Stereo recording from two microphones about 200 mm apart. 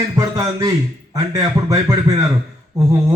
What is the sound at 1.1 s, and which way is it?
Speech, 15° right (ahead or behind).